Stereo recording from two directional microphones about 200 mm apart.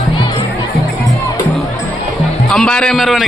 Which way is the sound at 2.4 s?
5° left (ahead or behind).